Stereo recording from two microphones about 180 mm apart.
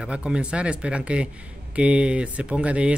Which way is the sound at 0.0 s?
5° right (ahead or behind).